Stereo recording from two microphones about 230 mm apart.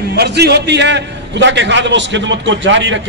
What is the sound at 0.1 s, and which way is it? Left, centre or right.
A man's voice, right.